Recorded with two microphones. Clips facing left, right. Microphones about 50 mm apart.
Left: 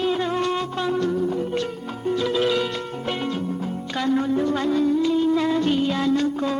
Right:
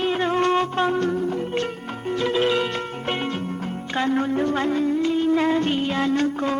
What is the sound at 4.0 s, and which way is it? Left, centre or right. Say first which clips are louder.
Music: even; right.